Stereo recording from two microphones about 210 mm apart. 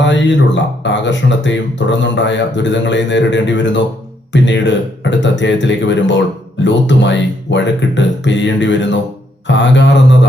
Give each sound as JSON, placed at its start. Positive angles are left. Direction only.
{"t": 0.0, "sound": "speech", "side_deg": 60}